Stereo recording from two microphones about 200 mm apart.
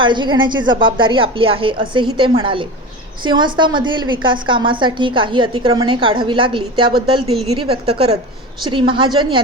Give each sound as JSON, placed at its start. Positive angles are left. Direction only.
{"t": 0.0, "sound": "a woman's voice", "side_deg": -25}